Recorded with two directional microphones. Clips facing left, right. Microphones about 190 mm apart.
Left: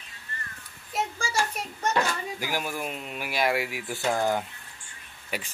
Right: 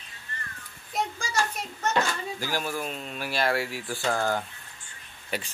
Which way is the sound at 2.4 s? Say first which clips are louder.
Right 1 dB; 15° left (ahead or behind).